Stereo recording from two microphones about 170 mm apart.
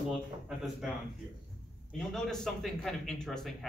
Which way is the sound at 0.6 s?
Centre (ahead or behind).